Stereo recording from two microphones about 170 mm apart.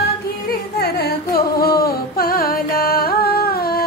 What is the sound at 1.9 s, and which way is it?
Carnatic music, 60° left (ahead or behind).